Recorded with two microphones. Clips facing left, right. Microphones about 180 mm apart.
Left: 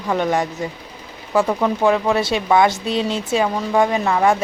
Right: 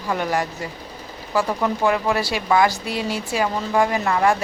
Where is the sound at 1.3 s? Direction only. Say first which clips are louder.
Left 4 dB; 20° left (ahead or behind).